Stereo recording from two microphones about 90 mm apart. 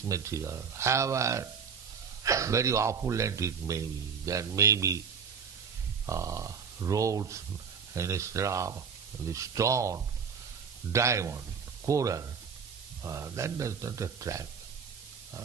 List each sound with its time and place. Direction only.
0.1 s a man's voice: 35° right (ahead or behind)
6.1 s a man's voice: 35° right (ahead or behind)